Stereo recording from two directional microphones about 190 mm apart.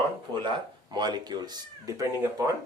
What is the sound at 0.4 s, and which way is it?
Speech, 20° right (ahead or behind).